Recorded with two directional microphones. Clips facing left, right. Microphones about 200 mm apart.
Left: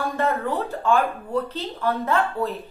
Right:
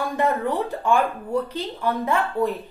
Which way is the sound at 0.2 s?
15° right (ahead or behind).